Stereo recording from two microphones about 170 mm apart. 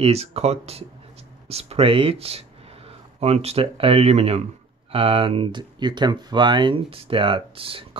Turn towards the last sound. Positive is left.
turn(degrees=-30)  # may be behind; listen again after turning